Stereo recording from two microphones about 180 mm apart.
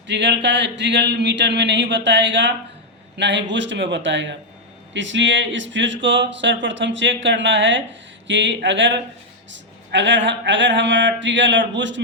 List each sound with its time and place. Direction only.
0.1 s a man's voice: 75° right (ahead or behind)
3.5 s speech: 90° right